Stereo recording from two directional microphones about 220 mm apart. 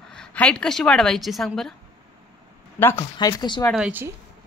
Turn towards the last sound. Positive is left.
turn(degrees=-5)  # may be behind; listen again after turning